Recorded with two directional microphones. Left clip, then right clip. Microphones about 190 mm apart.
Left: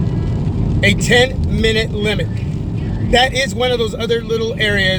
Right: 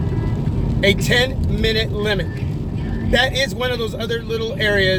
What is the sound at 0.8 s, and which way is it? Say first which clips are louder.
Speech: left 4 dB; 15° left (ahead or behind).